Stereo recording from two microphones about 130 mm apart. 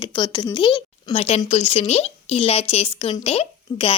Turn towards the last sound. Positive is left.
turn(degrees=50)  # may be behind; listen again after turning